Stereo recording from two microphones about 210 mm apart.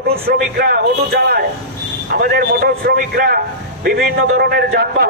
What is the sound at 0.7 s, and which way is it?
A man's voice, 50° right (ahead or behind).